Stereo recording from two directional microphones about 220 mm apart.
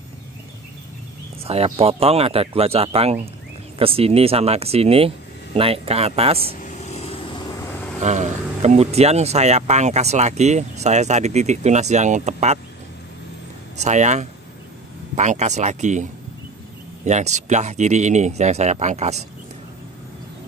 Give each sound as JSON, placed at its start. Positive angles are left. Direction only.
{"t": 1.4, "sound": "speech", "side_deg": -25}
{"t": 6.6, "sound": "vehicle", "side_deg": 30}
{"t": 8.0, "sound": "speech", "side_deg": -30}
{"t": 13.7, "sound": "speech", "side_deg": -30}